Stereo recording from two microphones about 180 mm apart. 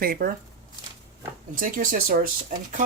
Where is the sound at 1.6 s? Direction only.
50° right (ahead or behind).